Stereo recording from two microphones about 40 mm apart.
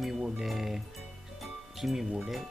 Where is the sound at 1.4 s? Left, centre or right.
Centre.